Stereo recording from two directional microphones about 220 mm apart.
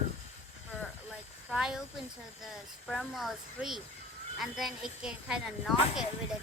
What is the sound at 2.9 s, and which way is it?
Speech, centre (ahead or behind).